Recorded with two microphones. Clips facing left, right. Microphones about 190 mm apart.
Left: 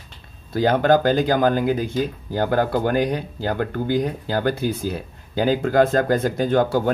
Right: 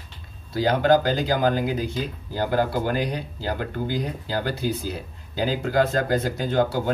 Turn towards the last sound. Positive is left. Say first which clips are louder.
# left 4 dB
turn(degrees=50)  # may be behind; listen again after turning